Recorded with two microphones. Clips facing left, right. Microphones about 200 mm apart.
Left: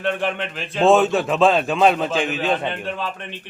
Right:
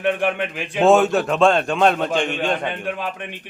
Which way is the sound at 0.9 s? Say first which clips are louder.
Right 1 dB; centre (ahead or behind).